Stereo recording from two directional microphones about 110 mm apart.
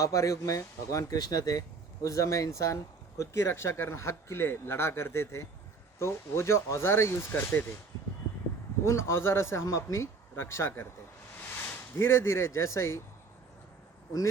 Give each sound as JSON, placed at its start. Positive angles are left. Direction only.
{"t": 0.0, "sound": "speech", "side_deg": 30}
{"t": 8.8, "sound": "speech", "side_deg": 25}